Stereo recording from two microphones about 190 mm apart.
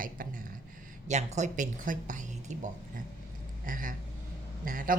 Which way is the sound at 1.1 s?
35° right (ahead or behind).